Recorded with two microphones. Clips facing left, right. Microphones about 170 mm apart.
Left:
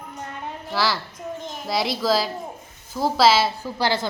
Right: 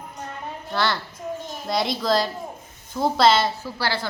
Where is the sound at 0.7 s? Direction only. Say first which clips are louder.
Even; 5° left (ahead or behind).